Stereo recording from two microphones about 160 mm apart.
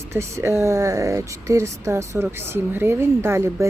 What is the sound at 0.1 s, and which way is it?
Speech, 15° right (ahead or behind).